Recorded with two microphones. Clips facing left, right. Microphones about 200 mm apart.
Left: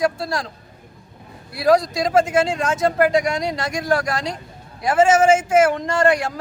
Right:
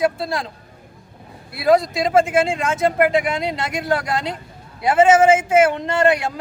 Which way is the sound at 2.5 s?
25° right (ahead or behind).